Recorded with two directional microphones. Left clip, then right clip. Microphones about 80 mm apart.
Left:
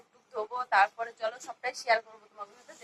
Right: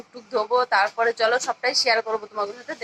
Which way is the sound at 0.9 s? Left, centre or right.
Right.